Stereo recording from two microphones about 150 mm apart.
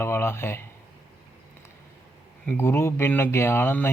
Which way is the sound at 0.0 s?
15° left (ahead or behind).